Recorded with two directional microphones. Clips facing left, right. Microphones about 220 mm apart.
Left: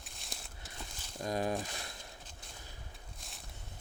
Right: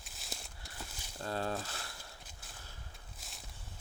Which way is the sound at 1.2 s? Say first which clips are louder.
Left 3 dB; 15° left (ahead or behind).